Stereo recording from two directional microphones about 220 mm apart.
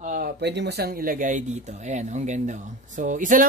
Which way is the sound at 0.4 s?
50° right (ahead or behind).